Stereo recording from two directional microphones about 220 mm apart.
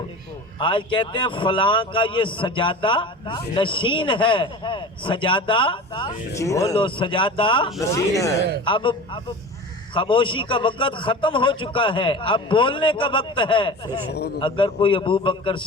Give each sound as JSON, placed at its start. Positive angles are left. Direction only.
{"t": 0.6, "sound": "a man's voice", "side_deg": 20}